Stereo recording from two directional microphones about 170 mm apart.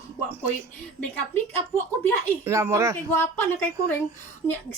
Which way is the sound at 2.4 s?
15° right (ahead or behind).